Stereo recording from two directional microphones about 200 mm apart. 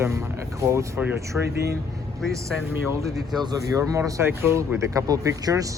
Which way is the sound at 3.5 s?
15° right (ahead or behind).